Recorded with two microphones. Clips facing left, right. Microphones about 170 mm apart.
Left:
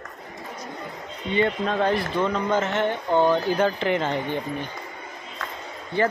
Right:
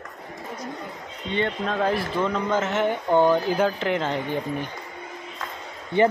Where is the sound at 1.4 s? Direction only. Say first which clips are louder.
Left 2 dB; centre (ahead or behind).